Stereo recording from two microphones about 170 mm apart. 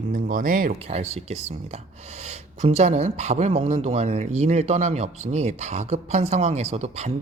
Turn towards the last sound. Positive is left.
turn(degrees=-40)  # may be behind; listen again after turning